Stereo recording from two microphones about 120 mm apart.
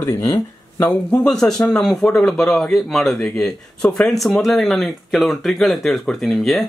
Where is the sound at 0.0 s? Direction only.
25° left (ahead or behind).